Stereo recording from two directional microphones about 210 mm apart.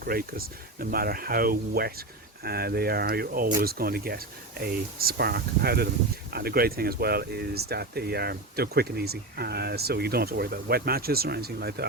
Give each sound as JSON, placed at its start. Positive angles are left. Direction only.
{"t": 0.0, "sound": "speech", "side_deg": -45}